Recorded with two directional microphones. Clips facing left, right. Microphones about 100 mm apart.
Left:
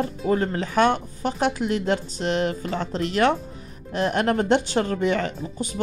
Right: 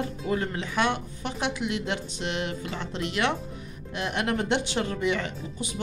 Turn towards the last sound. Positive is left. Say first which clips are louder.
# left 5 dB
turn(degrees=45)  # may be behind; listen again after turning